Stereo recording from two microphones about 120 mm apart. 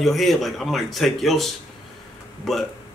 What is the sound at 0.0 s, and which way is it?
Speech, centre (ahead or behind).